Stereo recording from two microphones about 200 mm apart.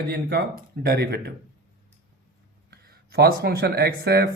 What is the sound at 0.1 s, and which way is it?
Speech, 50° right (ahead or behind).